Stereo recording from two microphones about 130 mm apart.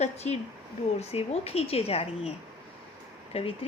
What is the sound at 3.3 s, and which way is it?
Speech, 50° left (ahead or behind).